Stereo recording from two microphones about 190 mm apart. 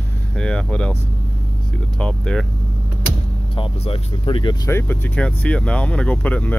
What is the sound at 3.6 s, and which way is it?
Speech, 25° left (ahead or behind).